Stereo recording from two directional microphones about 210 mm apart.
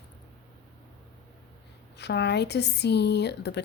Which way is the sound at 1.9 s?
55° left (ahead or behind).